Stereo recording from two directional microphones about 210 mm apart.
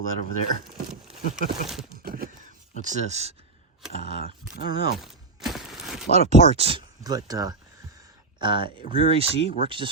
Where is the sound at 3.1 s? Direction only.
30° right (ahead or behind).